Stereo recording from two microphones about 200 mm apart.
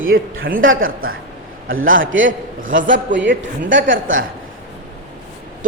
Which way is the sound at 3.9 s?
75° right (ahead or behind).